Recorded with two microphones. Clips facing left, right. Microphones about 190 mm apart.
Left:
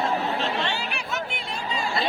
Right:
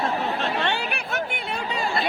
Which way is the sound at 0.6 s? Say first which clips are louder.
Right 3 dB; 55° right (ahead or behind).